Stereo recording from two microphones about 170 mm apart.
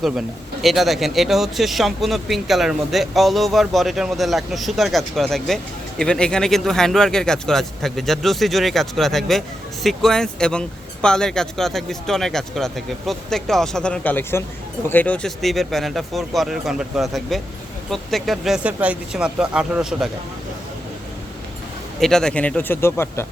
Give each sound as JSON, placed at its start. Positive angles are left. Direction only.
{"t": 0.6, "sound": "speech", "side_deg": 0}
{"t": 22.0, "sound": "speech", "side_deg": 5}